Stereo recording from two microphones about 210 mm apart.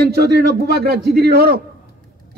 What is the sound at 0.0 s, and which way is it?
A man's voice, 50° right (ahead or behind).